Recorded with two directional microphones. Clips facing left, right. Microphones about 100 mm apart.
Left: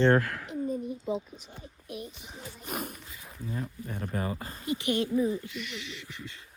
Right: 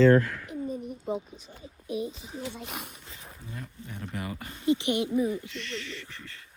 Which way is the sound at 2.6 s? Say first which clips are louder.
Left 4 dB; 45° left (ahead or behind).